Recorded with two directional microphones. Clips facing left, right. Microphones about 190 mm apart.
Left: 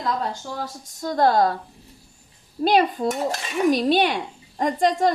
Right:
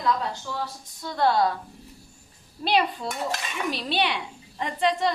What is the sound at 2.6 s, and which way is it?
A woman's voice, 45° left (ahead or behind).